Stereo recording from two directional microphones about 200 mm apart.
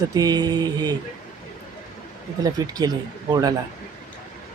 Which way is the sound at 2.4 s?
20° right (ahead or behind).